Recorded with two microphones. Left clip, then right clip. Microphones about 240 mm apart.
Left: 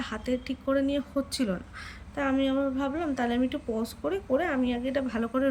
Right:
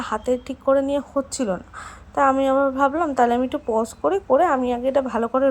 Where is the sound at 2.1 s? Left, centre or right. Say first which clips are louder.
Right 10 dB; right.